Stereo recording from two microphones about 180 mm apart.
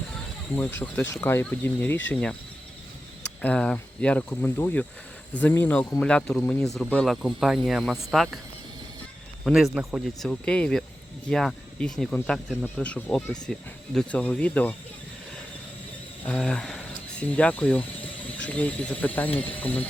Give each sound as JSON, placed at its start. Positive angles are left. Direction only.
{"t": 0.5, "sound": "speech", "side_deg": 15}
{"t": 3.4, "sound": "speech", "side_deg": 5}
{"t": 9.4, "sound": "speech", "side_deg": 0}
{"t": 16.2, "sound": "speech", "side_deg": 5}